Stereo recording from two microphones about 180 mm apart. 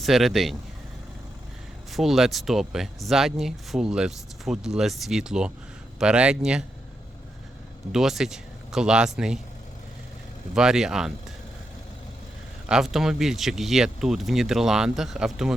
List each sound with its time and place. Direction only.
0.0 s speech: centre (ahead or behind)
1.9 s speech: centre (ahead or behind)
7.9 s speech: centre (ahead or behind)
10.5 s speech: 5° right (ahead or behind)
12.6 s speech: 5° right (ahead or behind)